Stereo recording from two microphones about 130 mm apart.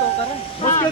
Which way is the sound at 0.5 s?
60° left (ahead or behind).